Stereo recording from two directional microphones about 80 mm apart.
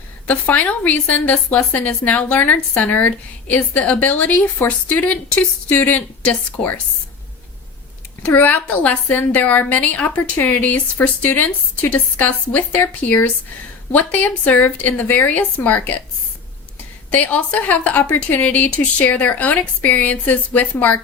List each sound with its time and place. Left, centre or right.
0.3 s a woman's voice: centre
8.2 s a woman's voice: left
17.1 s a woman's voice: centre